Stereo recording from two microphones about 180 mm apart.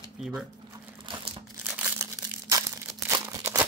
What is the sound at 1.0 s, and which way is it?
Crumpling, 30° right (ahead or behind).